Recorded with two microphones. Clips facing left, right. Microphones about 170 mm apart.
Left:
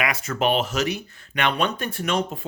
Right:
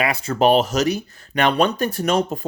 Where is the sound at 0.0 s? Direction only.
30° right (ahead or behind).